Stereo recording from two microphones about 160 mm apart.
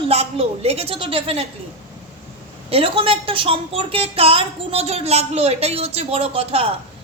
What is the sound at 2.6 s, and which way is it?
A woman's voice, 35° right (ahead or behind).